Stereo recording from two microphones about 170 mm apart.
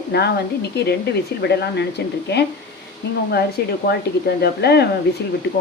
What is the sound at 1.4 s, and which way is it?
A woman's voice, 75° left (ahead or behind).